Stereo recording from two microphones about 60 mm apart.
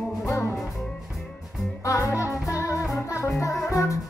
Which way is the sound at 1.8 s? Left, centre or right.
Left.